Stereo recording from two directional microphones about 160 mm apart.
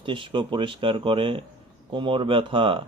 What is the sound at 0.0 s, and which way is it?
Speech, 30° right (ahead or behind).